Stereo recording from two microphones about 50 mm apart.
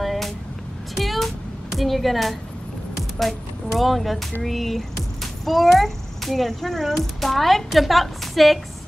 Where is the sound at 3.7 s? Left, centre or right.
Centre.